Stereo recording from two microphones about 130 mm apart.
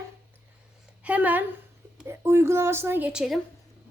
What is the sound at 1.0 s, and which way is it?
A woman's voice, 10° right (ahead or behind).